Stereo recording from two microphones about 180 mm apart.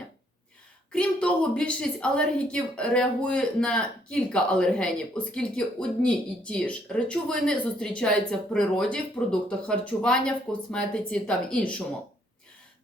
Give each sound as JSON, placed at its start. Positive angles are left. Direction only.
{"t": 0.9, "sound": "a woman's voice", "side_deg": 5}